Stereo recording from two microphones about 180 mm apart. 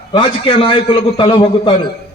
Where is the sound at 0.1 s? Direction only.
30° left (ahead or behind).